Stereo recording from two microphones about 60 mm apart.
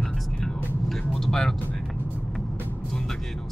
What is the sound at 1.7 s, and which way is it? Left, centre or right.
Music, centre.